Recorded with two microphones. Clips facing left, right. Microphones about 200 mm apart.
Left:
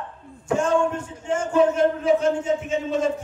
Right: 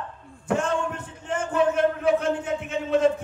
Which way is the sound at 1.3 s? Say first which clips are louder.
Left 3 dB; 60° right (ahead or behind).